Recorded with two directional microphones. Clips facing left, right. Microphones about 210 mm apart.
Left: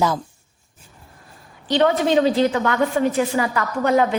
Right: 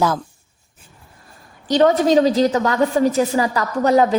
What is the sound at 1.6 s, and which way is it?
A woman's voice, 40° right (ahead or behind).